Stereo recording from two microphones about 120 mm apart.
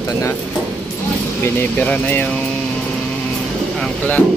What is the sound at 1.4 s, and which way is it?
Speech, 15° left (ahead or behind).